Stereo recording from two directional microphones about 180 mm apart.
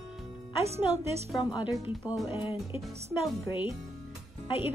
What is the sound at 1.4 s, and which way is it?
Speech, 25° left (ahead or behind).